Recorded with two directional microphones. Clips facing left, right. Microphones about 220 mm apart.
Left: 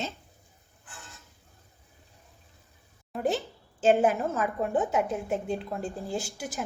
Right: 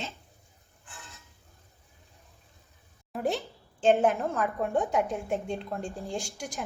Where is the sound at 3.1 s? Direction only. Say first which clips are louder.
Left 2 dB; centre (ahead or behind).